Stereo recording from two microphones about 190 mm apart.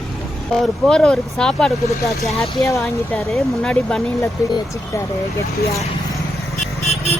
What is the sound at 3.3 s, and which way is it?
Speech, centre (ahead or behind).